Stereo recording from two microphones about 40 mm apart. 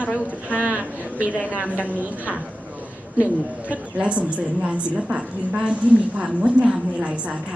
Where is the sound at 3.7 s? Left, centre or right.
Right.